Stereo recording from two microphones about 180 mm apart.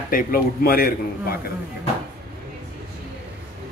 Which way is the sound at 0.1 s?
55° left (ahead or behind).